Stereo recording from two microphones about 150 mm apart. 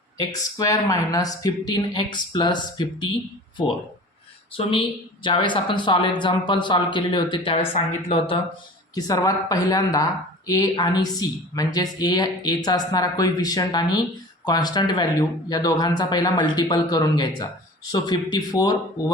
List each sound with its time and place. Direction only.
0.2 s speech: 25° left (ahead or behind)
4.5 s a woman's voice: 35° left (ahead or behind)
9.0 s speech: 25° left (ahead or behind)